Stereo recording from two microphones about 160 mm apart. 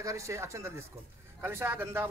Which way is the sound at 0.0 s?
20° right (ahead or behind).